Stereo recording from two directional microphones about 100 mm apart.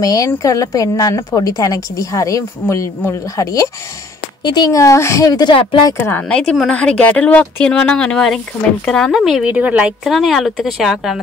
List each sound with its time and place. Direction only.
0.0 s a woman's voice: 35° left (ahead or behind)
5.5 s speech: 55° left (ahead or behind)
5.9 s a woman's voice: 25° left (ahead or behind)
6.2 s speech: 10° left (ahead or behind)
9.5 s a woman's voice: 15° right (ahead or behind)
10.0 s speech: centre (ahead or behind)